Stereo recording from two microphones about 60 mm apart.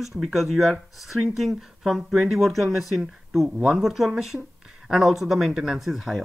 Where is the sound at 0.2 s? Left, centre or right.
Centre.